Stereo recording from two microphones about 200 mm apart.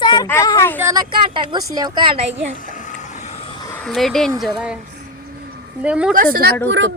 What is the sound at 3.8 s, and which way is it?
Speech, centre (ahead or behind).